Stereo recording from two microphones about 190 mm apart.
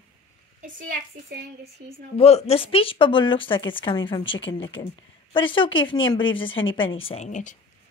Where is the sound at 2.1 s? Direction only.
35° left (ahead or behind).